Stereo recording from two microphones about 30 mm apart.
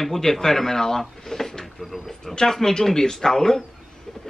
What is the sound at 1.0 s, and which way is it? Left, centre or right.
Drawer open or close, centre.